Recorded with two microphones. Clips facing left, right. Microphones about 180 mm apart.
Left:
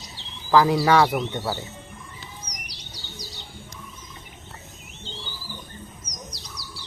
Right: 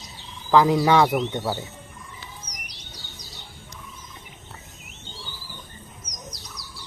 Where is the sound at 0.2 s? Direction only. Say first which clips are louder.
Right 1 dB; 30° left (ahead or behind).